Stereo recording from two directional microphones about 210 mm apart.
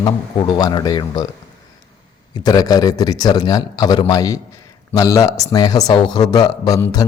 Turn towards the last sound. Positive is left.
turn(degrees=15)  # may be behind; listen again after turning